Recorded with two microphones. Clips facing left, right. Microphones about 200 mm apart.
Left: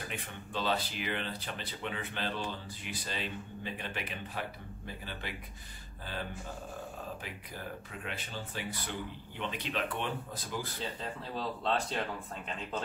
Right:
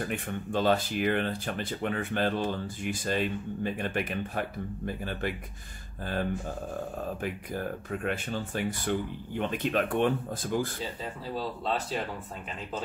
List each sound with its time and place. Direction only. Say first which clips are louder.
0.0 s speech: right 10 dB; 50° right (ahead or behind)
11.0 s speech: right 4 dB; 5° right (ahead or behind)